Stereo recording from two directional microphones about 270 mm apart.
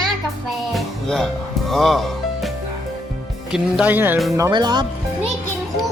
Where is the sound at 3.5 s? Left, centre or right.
Centre.